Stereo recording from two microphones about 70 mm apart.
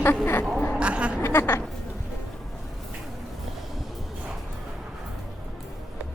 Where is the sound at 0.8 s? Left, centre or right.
Centre.